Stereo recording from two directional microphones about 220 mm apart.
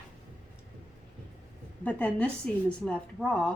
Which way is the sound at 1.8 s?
5° left (ahead or behind).